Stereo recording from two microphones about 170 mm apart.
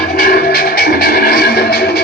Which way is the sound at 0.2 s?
60° left (ahead or behind).